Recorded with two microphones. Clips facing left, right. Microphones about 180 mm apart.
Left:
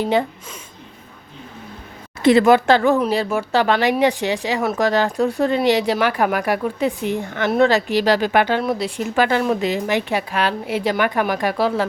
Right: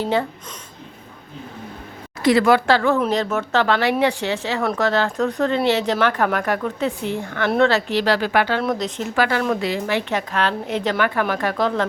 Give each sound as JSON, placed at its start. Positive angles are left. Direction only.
{"t": 0.0, "sound": "a woman's voice", "side_deg": 15}
{"t": 2.2, "sound": "a woman's voice", "side_deg": 20}